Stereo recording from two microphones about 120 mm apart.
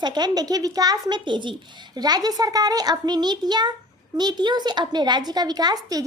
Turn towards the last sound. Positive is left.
turn(degrees=-30)  # may be behind; listen again after turning